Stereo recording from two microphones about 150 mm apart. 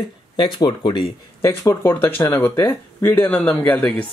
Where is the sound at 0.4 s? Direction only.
30° left (ahead or behind).